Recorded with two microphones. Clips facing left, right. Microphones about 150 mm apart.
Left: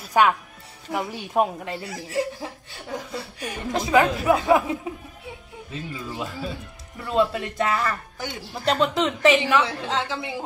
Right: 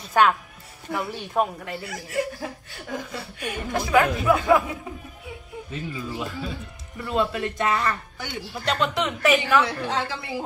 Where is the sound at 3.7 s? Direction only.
20° left (ahead or behind).